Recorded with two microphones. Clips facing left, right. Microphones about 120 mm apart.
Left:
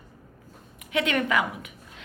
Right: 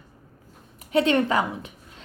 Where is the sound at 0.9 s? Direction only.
35° right (ahead or behind).